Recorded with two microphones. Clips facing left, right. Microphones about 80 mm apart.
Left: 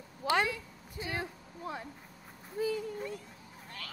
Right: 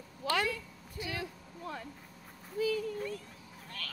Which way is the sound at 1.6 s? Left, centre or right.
Centre.